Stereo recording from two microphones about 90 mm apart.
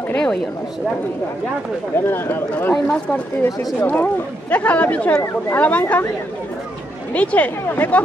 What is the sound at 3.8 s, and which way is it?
Speech, 20° left (ahead or behind).